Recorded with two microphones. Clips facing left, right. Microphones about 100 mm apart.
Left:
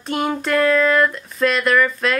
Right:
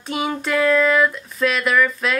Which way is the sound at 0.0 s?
Centre (ahead or behind).